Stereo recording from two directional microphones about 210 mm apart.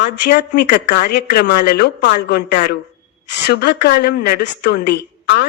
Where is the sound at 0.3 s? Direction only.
45° left (ahead or behind).